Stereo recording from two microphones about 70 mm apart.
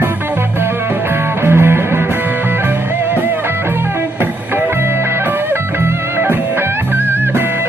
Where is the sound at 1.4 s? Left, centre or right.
Right.